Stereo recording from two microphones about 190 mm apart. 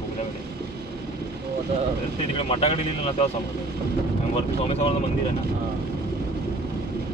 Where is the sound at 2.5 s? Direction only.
30° left (ahead or behind).